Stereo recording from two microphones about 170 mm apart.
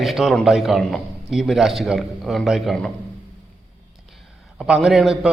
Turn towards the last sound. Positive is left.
turn(degrees=-5)  # may be behind; listen again after turning